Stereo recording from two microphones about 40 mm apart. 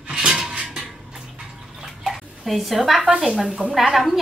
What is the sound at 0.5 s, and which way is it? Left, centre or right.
Music, centre.